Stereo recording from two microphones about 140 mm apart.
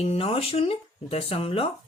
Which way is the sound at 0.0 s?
45° left (ahead or behind).